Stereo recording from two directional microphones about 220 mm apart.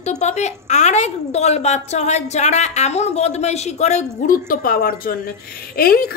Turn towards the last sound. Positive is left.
turn(degrees=45)  # may be behind; listen again after turning